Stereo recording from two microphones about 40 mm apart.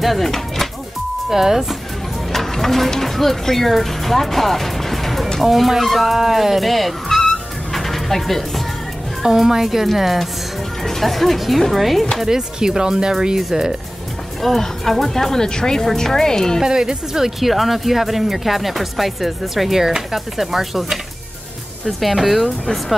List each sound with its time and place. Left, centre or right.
0.0 s speech: centre
1.3 s speech: centre
2.3 s speech: centre
7.2 s music: centre
9.2 s speech: centre
12.3 s speech: centre
14.4 s speech: centre
16.6 s speech: centre
22.0 s speech: centre